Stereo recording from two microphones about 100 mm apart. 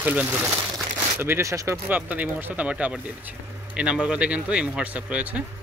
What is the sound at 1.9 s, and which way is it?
Speech, 15° right (ahead or behind).